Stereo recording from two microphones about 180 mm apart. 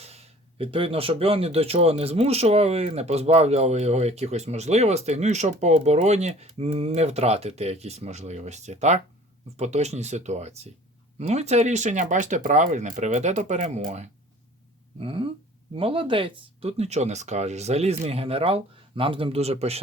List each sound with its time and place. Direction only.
0.0 s speech: 35° right (ahead or behind)